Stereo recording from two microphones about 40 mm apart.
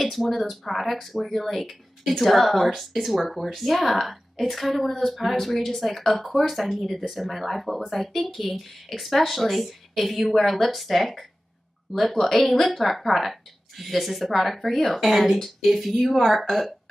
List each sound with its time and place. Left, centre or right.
0.0 s speech: centre